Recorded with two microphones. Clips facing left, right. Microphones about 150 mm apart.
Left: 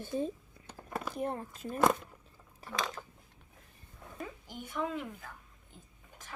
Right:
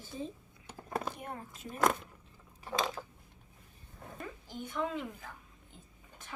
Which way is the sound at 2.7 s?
30° right (ahead or behind).